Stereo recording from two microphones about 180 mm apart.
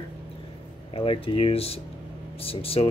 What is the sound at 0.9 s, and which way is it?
Speech, 30° left (ahead or behind).